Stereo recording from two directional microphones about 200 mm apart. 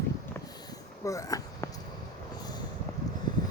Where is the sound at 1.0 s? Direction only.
15° left (ahead or behind).